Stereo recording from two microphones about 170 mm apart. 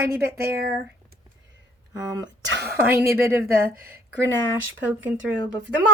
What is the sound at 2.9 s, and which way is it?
Speech, 15° right (ahead or behind).